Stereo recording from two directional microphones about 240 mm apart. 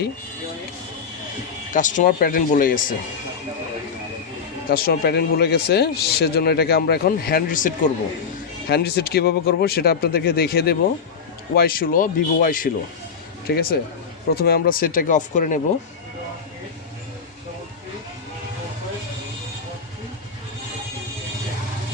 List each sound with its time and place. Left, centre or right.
1.7 s speech: left
4.7 s speech: left